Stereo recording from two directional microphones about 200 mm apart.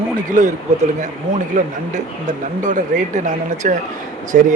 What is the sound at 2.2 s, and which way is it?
A man's voice, 40° right (ahead or behind).